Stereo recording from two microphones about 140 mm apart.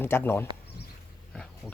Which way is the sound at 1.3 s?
5° left (ahead or behind).